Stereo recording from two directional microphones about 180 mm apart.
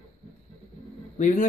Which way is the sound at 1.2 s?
40° left (ahead or behind).